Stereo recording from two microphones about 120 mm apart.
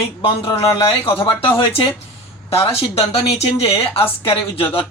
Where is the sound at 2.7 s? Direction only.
55° left (ahead or behind).